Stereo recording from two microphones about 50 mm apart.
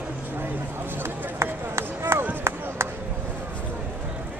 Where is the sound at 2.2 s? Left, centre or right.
Right.